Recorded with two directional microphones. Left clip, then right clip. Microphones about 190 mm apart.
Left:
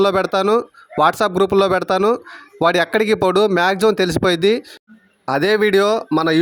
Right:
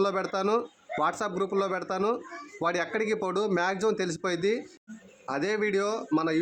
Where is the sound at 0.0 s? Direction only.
45° left (ahead or behind).